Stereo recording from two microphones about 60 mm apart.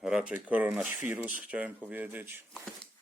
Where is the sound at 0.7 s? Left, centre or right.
Centre.